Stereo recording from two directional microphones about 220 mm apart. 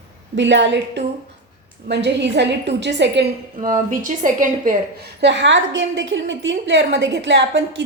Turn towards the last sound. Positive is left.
turn(degrees=-55)  # may be behind; listen again after turning